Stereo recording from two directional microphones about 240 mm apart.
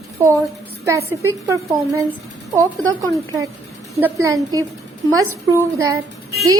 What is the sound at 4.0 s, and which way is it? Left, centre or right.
A woman's voice, centre.